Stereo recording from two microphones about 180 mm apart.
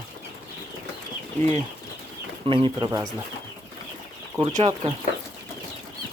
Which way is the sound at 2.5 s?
25° right (ahead or behind).